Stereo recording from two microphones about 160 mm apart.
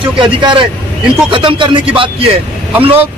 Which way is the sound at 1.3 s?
30° right (ahead or behind).